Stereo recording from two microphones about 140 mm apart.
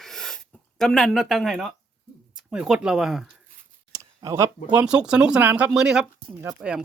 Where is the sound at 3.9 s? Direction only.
20° right (ahead or behind).